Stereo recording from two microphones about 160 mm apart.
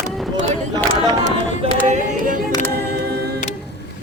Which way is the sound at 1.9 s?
50° right (ahead or behind).